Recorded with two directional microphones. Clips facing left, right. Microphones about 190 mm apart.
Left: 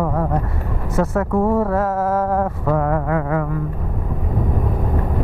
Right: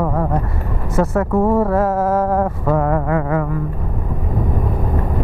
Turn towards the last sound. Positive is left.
turn(degrees=-15)  # may be behind; listen again after turning